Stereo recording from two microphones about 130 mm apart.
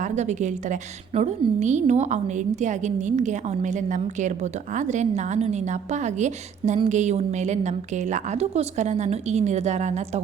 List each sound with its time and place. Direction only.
0.0 s a woman's voice: 65° right (ahead or behind)